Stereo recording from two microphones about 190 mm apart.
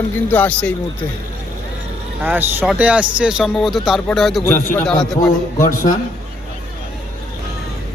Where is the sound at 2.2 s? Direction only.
10° right (ahead or behind); by 5.3 s 5° left (ahead or behind).